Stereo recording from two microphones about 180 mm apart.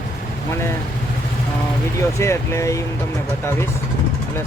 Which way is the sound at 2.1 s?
15° left (ahead or behind).